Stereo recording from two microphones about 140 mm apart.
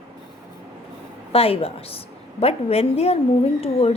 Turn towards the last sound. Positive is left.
turn(degrees=45)  # may be behind; listen again after turning